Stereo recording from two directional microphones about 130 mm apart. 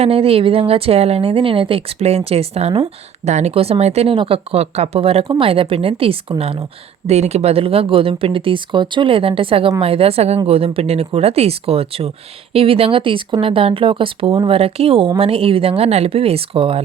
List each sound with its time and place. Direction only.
0.0 s speech: 50° right (ahead or behind)